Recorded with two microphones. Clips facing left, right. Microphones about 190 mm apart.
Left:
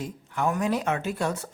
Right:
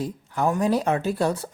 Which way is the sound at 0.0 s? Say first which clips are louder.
Right 3 dB; 35° right (ahead or behind).